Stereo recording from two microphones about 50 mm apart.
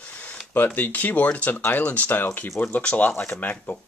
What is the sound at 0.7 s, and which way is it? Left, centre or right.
Speech, left.